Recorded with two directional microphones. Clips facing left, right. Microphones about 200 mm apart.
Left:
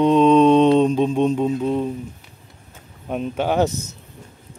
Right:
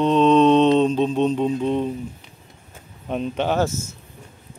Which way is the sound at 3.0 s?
5° left (ahead or behind).